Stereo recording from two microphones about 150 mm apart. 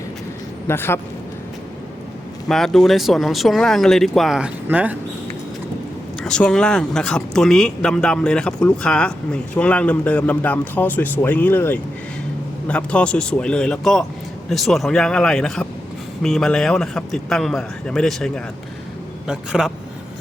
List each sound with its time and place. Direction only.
0.7 s speech: 15° left (ahead or behind)
2.5 s speech: 5° left (ahead or behind)
6.2 s speech: 5° left (ahead or behind)